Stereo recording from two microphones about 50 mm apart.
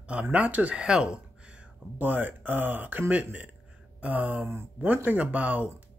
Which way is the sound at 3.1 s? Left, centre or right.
Right.